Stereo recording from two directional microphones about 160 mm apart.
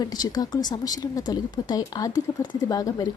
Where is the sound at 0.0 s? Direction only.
25° left (ahead or behind).